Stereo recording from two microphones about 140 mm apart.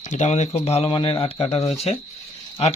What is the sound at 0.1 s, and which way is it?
Speech, 55° left (ahead or behind).